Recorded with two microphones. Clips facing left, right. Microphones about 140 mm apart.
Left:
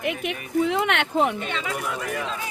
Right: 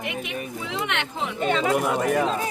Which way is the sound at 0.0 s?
55° left (ahead or behind).